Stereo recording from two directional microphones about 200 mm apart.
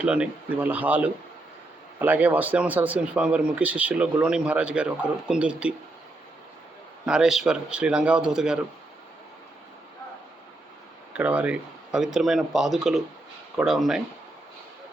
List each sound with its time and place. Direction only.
0.0 s speech: 5° right (ahead or behind)
7.0 s speech: 5° right (ahead or behind)
11.1 s speech: 5° right (ahead or behind)